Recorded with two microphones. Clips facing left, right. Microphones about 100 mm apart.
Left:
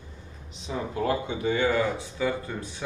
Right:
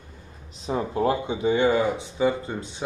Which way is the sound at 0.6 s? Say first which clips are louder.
Right 5 dB; 40° right (ahead or behind).